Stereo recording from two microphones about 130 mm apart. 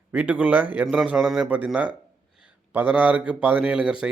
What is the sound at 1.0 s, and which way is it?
A man's voice, centre (ahead or behind).